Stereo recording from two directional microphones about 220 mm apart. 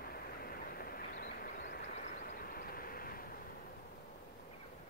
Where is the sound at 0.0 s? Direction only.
45° left (ahead or behind).